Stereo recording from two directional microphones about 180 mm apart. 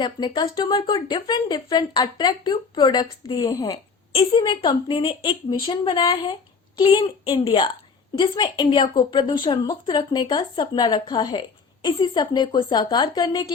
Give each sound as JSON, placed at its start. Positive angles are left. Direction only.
{"t": 0.0, "sound": "speech", "side_deg": 25}